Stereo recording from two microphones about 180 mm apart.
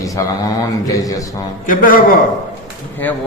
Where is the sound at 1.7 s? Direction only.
50° left (ahead or behind).